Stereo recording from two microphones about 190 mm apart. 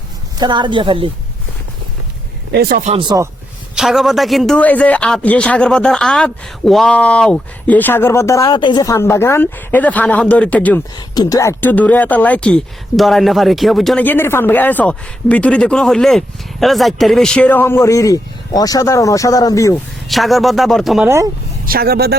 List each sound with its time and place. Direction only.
0.3 s speech: 25° right (ahead or behind)
2.5 s speech: 55° right (ahead or behind)
2.8 s speech: 30° right (ahead or behind)
3.8 s speech: centre (ahead or behind)
10.9 s speech: 20° left (ahead or behind)
20.1 s speech: centre (ahead or behind)
21.7 s speech: 55° right (ahead or behind)